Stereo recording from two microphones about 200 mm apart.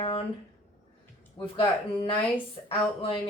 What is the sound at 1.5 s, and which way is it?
Speech, 30° left (ahead or behind).